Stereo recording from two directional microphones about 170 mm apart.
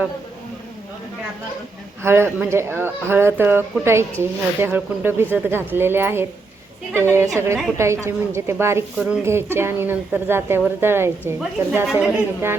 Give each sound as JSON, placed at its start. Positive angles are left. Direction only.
{"t": 2.0, "sound": "speech", "side_deg": -15}